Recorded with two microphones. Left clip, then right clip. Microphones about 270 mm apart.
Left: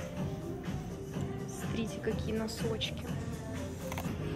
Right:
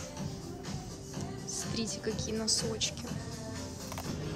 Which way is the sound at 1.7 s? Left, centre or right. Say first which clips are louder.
Left 1 dB; centre.